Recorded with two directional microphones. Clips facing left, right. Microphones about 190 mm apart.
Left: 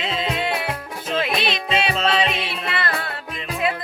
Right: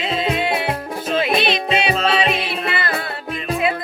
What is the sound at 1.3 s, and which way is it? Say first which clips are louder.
Music: right 5 dB; 30° right (ahead or behind).